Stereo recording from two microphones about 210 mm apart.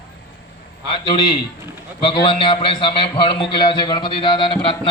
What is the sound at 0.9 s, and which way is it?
A man's voice, 25° left (ahead or behind).